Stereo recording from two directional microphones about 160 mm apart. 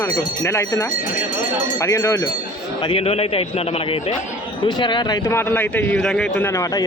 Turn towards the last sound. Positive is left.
turn(degrees=20)  # may be behind; listen again after turning